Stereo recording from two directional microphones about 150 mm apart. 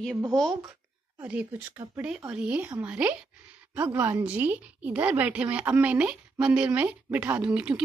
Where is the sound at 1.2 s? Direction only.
10° right (ahead or behind).